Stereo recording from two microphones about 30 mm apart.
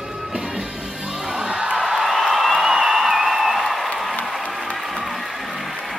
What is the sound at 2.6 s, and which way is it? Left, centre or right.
Music, centre.